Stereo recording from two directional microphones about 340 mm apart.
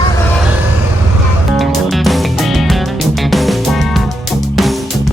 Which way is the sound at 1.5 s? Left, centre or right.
Centre.